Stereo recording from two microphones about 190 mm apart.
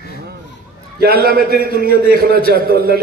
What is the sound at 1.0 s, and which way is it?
A man's voice, 55° right (ahead or behind).